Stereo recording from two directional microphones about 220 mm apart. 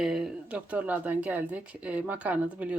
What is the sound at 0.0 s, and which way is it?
Speech, 5° right (ahead or behind).